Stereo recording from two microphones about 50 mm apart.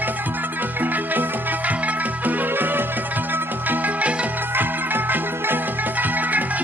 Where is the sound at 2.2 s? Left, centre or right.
Right.